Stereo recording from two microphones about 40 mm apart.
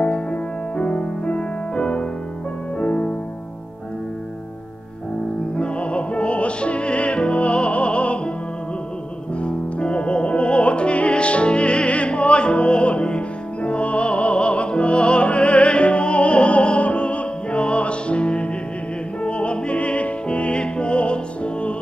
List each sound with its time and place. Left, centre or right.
0.0 s music: left
5.6 s music: left
9.4 s opera: left